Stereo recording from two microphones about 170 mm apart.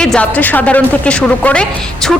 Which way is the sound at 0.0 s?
5° left (ahead or behind).